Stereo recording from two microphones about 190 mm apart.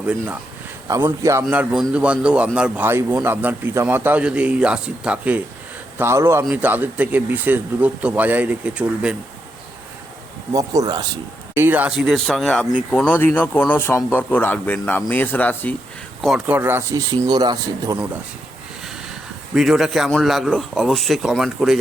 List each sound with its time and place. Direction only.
0.0 s speech: 10° right (ahead or behind)
10.5 s a man's voice: 20° right (ahead or behind)
11.5 s speech: 10° right (ahead or behind)
16.6 s a man's voice: 15° right (ahead or behind)
19.5 s speech: centre (ahead or behind)